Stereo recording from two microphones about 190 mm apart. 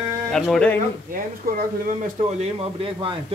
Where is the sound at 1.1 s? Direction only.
50° right (ahead or behind).